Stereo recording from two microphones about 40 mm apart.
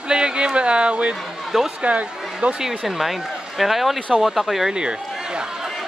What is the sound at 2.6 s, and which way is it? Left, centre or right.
Speech, centre.